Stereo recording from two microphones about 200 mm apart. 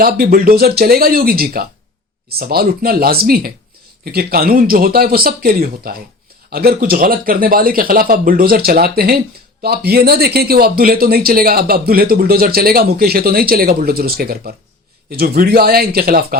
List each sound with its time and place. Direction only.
0.0 s speech: 50° right (ahead or behind)